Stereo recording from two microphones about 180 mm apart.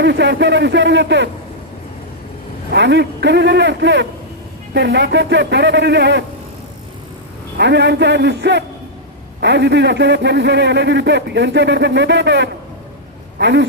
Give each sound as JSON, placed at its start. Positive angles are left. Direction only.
{"t": 0.0, "sound": "a man's voice", "side_deg": -75}
{"t": 2.7, "sound": "a man's voice", "side_deg": -75}
{"t": 7.6, "sound": "a man's voice", "side_deg": -75}